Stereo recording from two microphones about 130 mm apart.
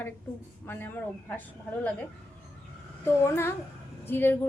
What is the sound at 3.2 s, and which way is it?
A woman's voice, 20° left (ahead or behind).